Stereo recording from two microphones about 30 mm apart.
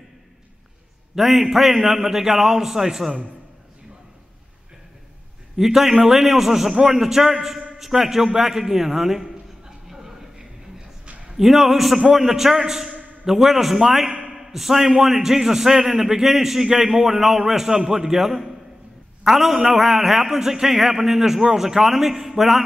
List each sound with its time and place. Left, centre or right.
1.1 s a man's voice: centre
5.6 s a man's voice: centre
11.3 s a man's voice: centre
20.3 s a man's voice: centre